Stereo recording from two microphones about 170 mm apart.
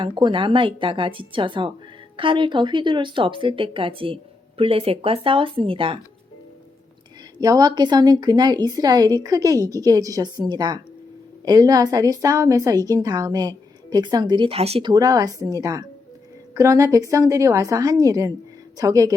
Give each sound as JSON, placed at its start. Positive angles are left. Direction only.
{"t": 0.0, "sound": "a woman's voice", "side_deg": -30}
{"t": 7.3, "sound": "a woman's voice", "side_deg": -20}
{"t": 14.8, "sound": "a woman's voice", "side_deg": -20}